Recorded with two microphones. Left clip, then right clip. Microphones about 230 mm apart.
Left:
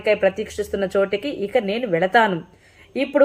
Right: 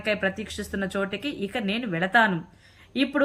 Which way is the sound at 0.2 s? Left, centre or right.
Centre.